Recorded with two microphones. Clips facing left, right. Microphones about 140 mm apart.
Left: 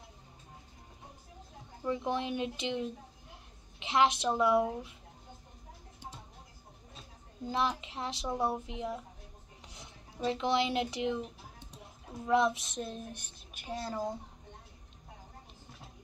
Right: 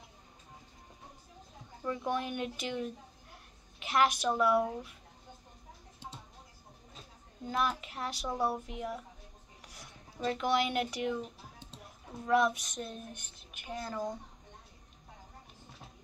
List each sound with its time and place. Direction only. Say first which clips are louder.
1.8 s a woman's voice: left 1 dB; 25° left (ahead or behind)
3.8 s child singing: left 1 dB; 25° left (ahead or behind)
7.4 s child singing: left 1 dB; 25° left (ahead or behind)
9.7 s speech: even; 25° left (ahead or behind)
12.3 s child singing: even; 25° left (ahead or behind)